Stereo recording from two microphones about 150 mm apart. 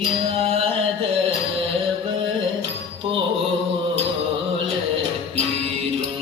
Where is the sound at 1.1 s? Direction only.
40° right (ahead or behind).